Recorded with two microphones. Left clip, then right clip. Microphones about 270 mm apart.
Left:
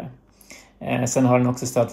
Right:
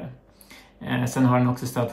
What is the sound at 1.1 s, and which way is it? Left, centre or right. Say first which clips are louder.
Speech: left 3 dB; centre.